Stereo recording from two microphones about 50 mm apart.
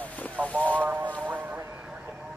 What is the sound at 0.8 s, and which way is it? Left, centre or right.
Speech, right.